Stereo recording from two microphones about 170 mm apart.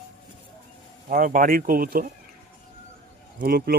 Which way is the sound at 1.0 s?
55° right (ahead or behind).